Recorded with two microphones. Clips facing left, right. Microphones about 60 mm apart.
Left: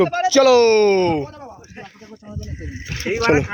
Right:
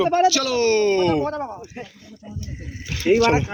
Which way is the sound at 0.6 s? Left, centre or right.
Left.